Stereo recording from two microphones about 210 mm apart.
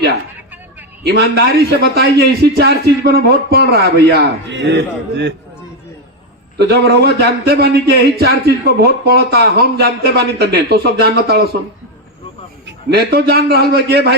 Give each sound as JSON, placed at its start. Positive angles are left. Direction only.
{"t": 1.0, "sound": "a man's voice", "side_deg": -50}
{"t": 6.6, "sound": "a man's voice", "side_deg": -50}
{"t": 12.9, "sound": "a man's voice", "side_deg": -50}